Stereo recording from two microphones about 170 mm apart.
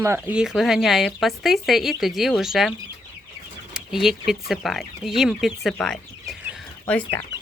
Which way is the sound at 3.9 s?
Centre (ahead or behind).